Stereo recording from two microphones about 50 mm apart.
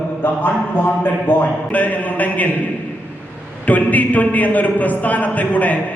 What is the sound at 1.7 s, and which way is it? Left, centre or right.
Speech, left.